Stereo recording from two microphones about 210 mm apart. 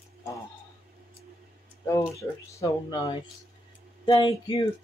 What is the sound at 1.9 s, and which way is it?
Speech, 15° left (ahead or behind).